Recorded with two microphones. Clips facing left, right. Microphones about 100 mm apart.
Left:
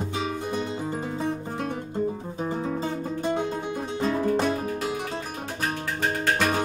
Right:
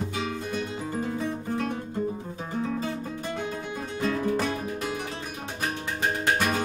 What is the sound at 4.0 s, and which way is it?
Music, 25° left (ahead or behind).